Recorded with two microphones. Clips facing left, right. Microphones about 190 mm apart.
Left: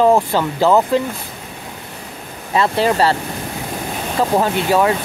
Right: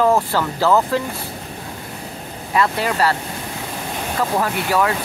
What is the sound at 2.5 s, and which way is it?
Speech, 30° left (ahead or behind).